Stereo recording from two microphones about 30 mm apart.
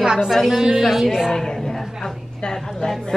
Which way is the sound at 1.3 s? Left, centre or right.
Centre.